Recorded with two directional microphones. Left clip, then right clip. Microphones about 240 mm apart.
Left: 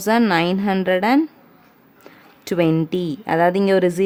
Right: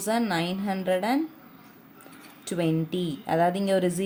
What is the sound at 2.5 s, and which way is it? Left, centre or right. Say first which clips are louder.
Speech: left 9 dB; left.